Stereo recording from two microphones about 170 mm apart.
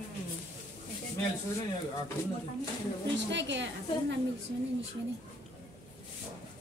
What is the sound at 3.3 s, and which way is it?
Speech, 90° right.